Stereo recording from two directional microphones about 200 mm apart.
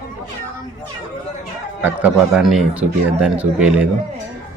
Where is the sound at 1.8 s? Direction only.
5° right (ahead or behind).